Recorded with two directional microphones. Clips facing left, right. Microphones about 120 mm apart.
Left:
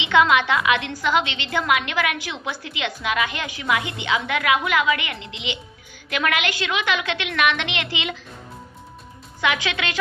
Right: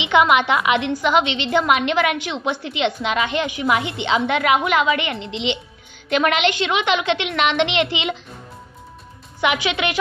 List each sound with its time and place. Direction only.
0.0 s a woman's voice: 20° right (ahead or behind)
9.4 s a woman's voice: 20° right (ahead or behind)